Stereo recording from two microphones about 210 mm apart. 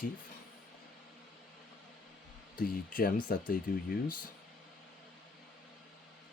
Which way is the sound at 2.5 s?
45° left (ahead or behind).